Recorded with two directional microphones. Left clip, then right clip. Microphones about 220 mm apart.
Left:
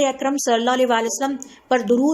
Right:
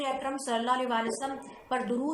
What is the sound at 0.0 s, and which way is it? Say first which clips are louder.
A woman's voice: left 12 dB; 50° left (ahead or behind).